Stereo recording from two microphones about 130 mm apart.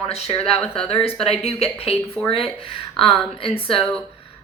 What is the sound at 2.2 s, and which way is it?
Speech, 5° left (ahead or behind).